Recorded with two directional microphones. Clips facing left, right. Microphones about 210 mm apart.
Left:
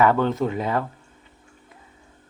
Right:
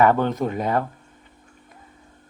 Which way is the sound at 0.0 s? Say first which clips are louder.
Right 1 dB; 45° right (ahead or behind).